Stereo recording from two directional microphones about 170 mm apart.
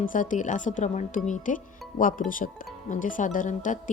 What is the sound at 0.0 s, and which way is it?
Speech, 50° left (ahead or behind).